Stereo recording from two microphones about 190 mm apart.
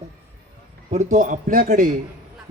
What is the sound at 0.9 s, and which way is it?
Speech, 40° right (ahead or behind).